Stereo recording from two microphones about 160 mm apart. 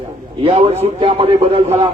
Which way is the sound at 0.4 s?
40° right (ahead or behind).